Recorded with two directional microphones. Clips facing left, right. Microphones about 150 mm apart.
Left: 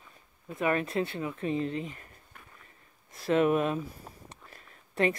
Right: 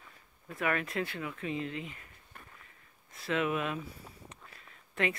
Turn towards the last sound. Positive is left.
turn(degrees=40)  # may be behind; listen again after turning